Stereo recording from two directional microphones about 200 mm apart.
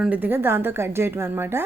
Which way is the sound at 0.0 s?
10° right (ahead or behind).